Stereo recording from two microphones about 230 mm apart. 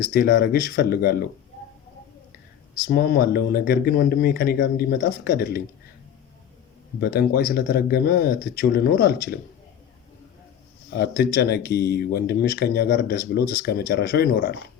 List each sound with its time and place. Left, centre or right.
0.0 s speech: left
2.9 s speech: left
7.0 s speech: left
10.9 s speech: left